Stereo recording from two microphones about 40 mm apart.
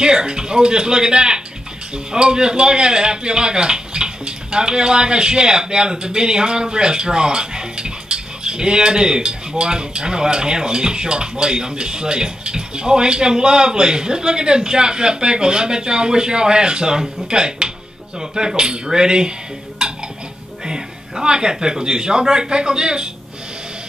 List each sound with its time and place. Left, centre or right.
0.0 s speech: centre
19.8 s cutlery: centre
20.6 s a man's voice: centre